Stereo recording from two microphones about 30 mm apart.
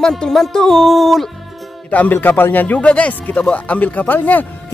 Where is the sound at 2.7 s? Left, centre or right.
Left.